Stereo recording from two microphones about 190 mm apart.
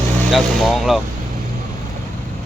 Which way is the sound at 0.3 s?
Centre (ahead or behind).